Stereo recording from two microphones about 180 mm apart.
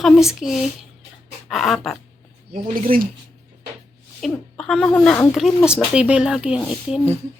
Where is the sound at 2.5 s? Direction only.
50° right (ahead or behind).